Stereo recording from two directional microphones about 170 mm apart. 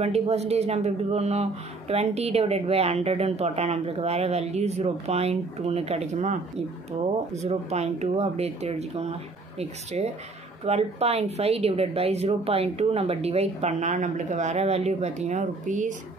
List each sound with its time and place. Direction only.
0.0 s speech: 40° right (ahead or behind)
7.4 s speech: 40° right (ahead or behind)